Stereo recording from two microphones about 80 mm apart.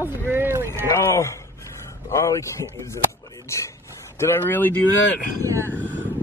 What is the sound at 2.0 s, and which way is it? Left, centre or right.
A man's voice, left.